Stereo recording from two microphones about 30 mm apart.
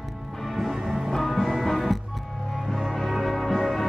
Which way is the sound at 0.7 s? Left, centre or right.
Centre.